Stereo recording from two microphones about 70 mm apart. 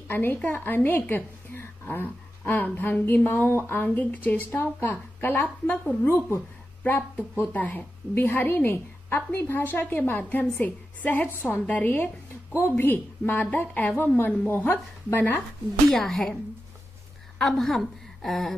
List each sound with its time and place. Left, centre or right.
0.1 s a woman's voice: left
6.0 s speech: left
6.8 s a woman's voice: left
15.9 s a woman's voice: centre
17.4 s a woman's voice: centre